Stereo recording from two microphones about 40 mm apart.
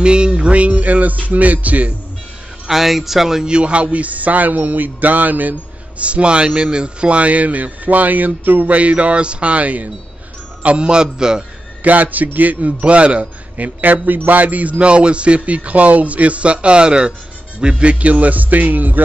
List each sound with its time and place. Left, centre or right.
0.0 s music: right
1.2 s speech: right
2.7 s speech: centre
3.4 s speech: right
6.0 s a man's voice: right
11.8 s speech: right
12.8 s a man's voice: right
17.9 s speech: right